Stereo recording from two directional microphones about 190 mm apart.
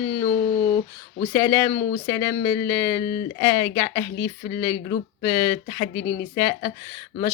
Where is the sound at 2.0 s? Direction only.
15° left (ahead or behind).